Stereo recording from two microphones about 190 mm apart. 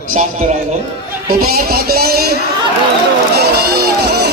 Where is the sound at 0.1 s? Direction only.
40° right (ahead or behind).